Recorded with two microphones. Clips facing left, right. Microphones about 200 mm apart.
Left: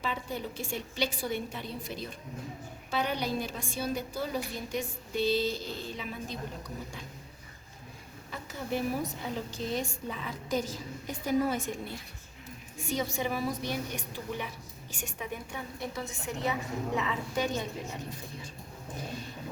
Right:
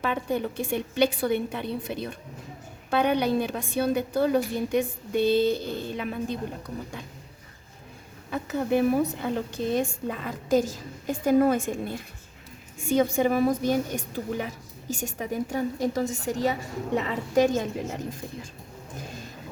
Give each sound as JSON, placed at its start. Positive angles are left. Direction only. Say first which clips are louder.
{"t": 0.0, "sound": "a woman's voice", "louder": "right 8 dB", "side_deg": -60}
{"t": 8.3, "sound": "a woman's voice", "louder": "right 10 dB", "side_deg": -60}